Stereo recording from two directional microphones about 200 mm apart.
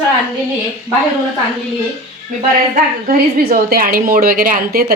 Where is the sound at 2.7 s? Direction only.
45° right (ahead or behind).